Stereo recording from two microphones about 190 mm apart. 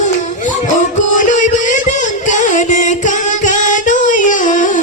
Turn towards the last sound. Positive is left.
turn(degrees=45)  # may be behind; listen again after turning